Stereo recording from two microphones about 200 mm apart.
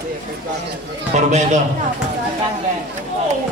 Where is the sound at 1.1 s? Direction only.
35° right (ahead or behind).